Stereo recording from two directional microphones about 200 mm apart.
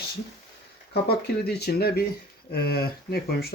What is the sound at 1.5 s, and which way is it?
Speech, 55° left (ahead or behind).